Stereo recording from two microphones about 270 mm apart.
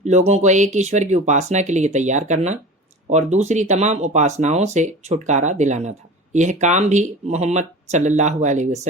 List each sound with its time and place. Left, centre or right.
0.0 s speech: right